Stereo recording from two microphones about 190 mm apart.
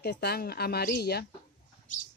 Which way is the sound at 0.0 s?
55° left (ahead or behind).